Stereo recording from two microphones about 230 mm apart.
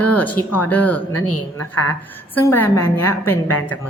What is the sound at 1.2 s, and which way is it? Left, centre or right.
Speech, left.